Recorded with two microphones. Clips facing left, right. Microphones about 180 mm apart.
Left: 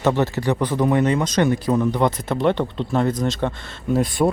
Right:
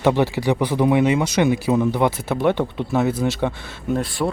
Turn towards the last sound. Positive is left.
turn(degrees=15)  # may be behind; listen again after turning